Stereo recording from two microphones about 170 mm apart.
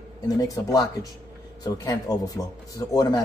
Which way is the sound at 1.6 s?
20° left (ahead or behind).